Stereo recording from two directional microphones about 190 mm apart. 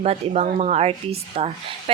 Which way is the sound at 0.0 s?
35° right (ahead or behind).